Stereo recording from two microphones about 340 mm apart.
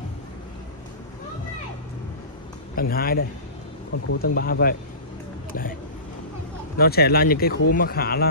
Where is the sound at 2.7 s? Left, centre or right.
Left.